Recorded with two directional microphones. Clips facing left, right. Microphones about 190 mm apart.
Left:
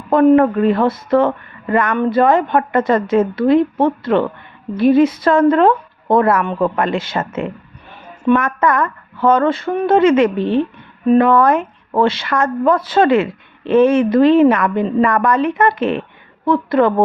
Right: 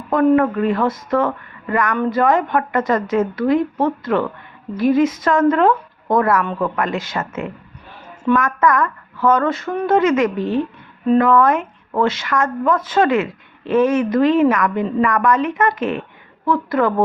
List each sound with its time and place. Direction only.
0.1 s speech: 30° left (ahead or behind)
8.3 s a woman's voice: 30° left (ahead or behind)